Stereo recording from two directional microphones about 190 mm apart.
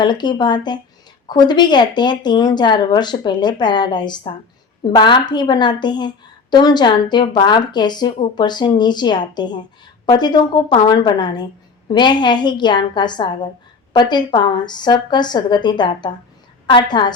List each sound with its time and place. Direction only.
0.0 s a woman's voice: 25° left (ahead or behind)